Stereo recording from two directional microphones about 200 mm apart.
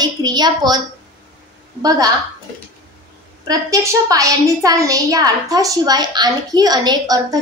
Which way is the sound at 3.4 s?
15° right (ahead or behind).